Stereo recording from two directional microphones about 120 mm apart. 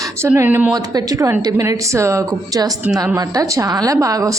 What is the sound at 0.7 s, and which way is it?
A woman's voice, 30° right (ahead or behind).